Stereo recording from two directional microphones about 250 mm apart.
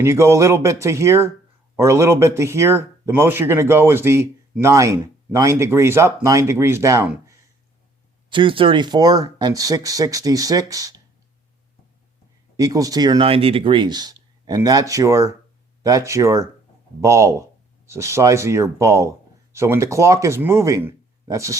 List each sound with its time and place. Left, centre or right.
0.0 s speech: centre
12.5 s speech: centre